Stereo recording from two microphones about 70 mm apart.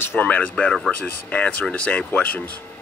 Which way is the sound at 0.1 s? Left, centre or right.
Centre.